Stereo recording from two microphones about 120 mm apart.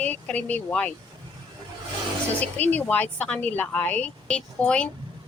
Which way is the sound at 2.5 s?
15° left (ahead or behind).